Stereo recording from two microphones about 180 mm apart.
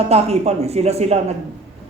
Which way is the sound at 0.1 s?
35° right (ahead or behind).